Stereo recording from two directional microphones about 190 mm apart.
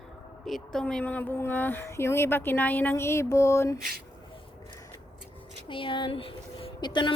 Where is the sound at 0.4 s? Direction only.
Centre (ahead or behind).